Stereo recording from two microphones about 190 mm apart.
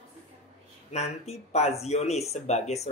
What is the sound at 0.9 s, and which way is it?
Speech, 35° left (ahead or behind).